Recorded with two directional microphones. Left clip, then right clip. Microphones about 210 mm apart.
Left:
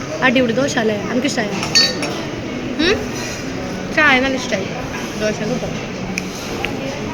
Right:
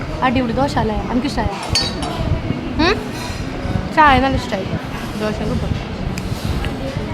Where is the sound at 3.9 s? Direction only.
15° right (ahead or behind).